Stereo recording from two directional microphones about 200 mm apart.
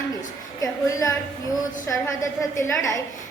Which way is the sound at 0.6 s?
15° left (ahead or behind).